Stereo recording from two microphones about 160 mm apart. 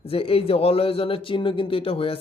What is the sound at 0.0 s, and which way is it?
Speech, 35° left (ahead or behind).